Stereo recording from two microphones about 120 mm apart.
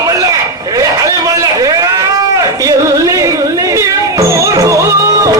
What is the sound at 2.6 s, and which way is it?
Music, 25° right (ahead or behind).